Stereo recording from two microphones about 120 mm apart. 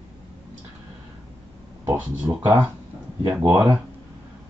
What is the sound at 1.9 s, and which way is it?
Speech, 15° right (ahead or behind).